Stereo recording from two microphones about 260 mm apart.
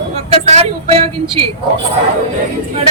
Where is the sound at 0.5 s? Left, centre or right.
Right.